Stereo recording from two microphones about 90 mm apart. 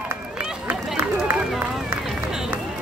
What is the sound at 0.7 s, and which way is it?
Run, 15° right (ahead or behind).